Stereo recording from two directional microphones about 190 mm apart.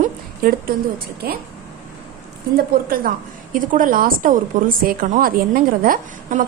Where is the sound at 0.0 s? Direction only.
50° right (ahead or behind).